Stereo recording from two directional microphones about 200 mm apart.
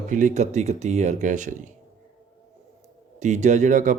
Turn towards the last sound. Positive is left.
turn(degrees=-40)  # may be behind; listen again after turning